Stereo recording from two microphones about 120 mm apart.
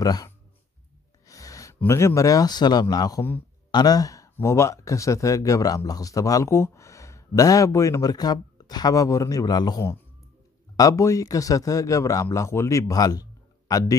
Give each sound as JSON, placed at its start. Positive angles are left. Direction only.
{"t": 0.0, "sound": "speech", "side_deg": 30}